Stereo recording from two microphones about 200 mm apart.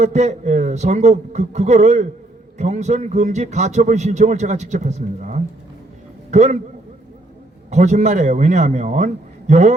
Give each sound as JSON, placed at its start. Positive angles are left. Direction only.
{"t": 0.0, "sound": "speech", "side_deg": -35}
{"t": 7.7, "sound": "speech", "side_deg": -35}